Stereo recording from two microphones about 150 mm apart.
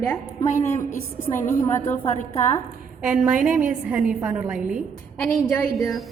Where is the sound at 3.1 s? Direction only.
10° right (ahead or behind).